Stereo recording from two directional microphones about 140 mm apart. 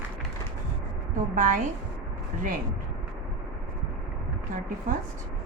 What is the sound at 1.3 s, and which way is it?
Speech, 65° right (ahead or behind).